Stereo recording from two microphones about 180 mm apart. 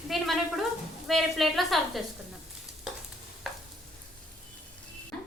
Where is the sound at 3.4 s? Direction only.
Centre (ahead or behind).